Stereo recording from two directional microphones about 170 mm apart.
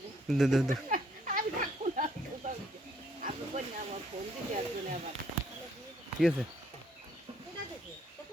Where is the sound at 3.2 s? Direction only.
40° right (ahead or behind).